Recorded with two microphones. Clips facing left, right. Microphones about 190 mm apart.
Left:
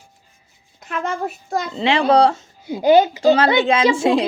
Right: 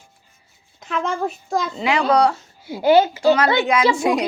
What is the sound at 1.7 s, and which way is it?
A woman's voice, 30° left (ahead or behind).